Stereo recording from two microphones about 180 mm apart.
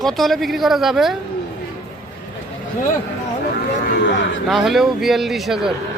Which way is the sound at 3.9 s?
75° left (ahead or behind).